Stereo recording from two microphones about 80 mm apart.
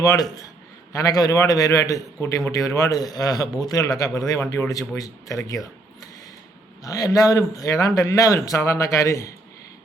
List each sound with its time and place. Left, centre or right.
0.0 s a man's voice: left
4.4 s a man's voice: left
6.8 s a man's voice: left